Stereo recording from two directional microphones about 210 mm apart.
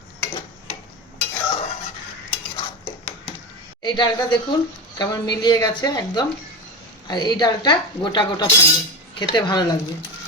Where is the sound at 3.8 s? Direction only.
20° left (ahead or behind).